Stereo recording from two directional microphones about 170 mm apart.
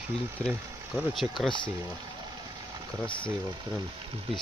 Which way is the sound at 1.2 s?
10° right (ahead or behind).